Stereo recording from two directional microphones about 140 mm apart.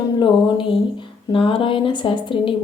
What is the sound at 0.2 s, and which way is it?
A woman's voice, 35° left (ahead or behind).